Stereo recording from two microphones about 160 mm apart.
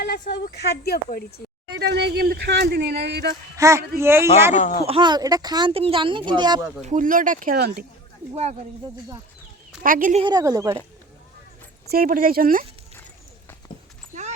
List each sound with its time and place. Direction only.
0.0 s speech: 90° left
1.7 s speech: 90° right
3.6 s speech: 20° right (ahead or behind)
4.5 s speech: 50° left (ahead or behind)
4.9 s speech: 30° right (ahead or behind)
6.8 s speech: 55° right (ahead or behind); by 7.9 s 80° right
9.8 s speech: 60° right (ahead or behind)
10.2 s speech: 25° right (ahead or behind)
11.9 s speech: 65° right (ahead or behind)
13.7 s a sound: 30° left (ahead or behind)